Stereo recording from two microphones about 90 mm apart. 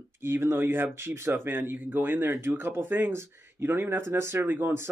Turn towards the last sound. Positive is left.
turn(degrees=-25)  # may be behind; listen again after turning